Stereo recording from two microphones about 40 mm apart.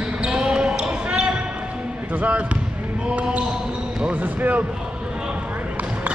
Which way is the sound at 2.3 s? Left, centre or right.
Right.